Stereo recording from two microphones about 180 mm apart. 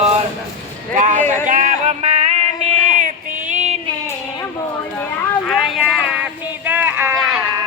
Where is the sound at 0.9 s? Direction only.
45° right (ahead or behind).